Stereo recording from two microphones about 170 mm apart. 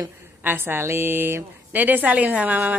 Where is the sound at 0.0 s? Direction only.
10° right (ahead or behind).